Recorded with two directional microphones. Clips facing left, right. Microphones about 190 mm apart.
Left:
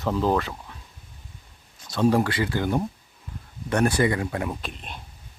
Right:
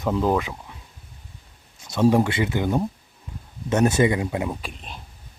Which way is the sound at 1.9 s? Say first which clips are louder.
Right 2 dB; 20° right (ahead or behind).